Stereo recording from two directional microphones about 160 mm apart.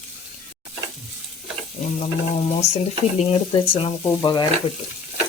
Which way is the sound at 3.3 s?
35° left (ahead or behind).